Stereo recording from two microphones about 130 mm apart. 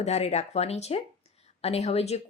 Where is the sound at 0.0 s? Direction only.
55° left (ahead or behind).